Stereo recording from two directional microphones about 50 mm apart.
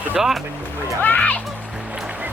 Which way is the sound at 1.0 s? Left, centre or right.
Left.